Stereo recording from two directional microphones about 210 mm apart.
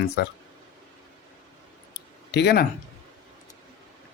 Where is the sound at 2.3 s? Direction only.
50° left (ahead or behind).